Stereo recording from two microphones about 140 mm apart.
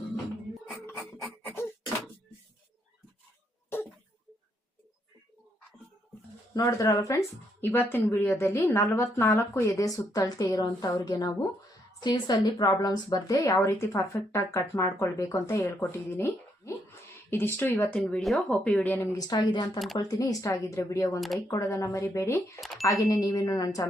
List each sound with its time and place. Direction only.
6.5 s speech: 25° left (ahead or behind)
19.1 s a woman's voice: 30° left (ahead or behind)
22.6 s a sound: centre (ahead or behind)
22.9 s speech: 20° left (ahead or behind)